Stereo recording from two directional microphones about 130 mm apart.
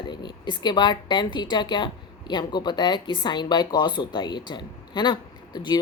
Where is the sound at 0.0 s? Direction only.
35° left (ahead or behind).